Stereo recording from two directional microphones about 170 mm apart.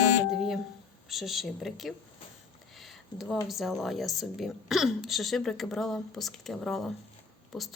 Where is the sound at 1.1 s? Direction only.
Centre (ahead or behind).